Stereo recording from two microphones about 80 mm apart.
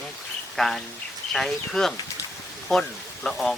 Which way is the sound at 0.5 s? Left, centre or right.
Centre.